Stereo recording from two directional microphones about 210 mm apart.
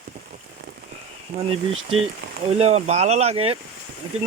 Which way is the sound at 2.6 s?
30° right (ahead or behind).